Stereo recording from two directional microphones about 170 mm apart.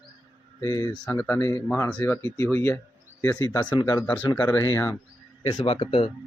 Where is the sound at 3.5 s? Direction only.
25° left (ahead or behind).